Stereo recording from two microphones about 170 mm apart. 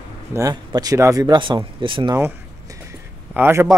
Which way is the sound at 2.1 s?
15° right (ahead or behind).